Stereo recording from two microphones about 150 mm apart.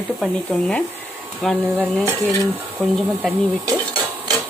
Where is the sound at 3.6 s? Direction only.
30° right (ahead or behind).